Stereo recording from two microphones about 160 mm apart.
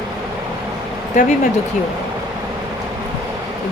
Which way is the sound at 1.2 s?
50° left (ahead or behind).